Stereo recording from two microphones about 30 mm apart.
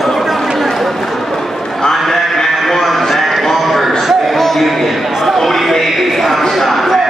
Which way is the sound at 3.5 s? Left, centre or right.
Centre.